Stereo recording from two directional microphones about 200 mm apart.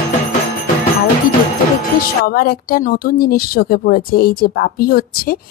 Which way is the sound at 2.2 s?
45° left (ahead or behind).